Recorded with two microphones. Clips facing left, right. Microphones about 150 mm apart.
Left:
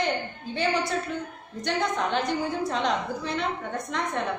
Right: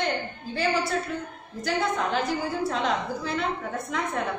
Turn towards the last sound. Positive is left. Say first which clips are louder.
# even
turn(degrees=-5)  # may be behind; listen again after turning